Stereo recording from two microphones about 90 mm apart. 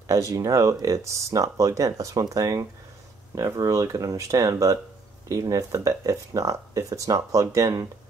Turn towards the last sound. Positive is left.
turn(degrees=-35)  # may be behind; listen again after turning